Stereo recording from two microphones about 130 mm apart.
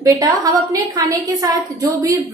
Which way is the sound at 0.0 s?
25° right (ahead or behind).